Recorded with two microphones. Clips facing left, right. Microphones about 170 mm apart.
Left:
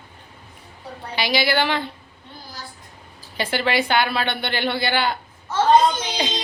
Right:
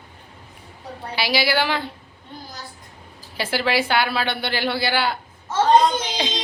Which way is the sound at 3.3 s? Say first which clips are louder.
Even; 5° right (ahead or behind).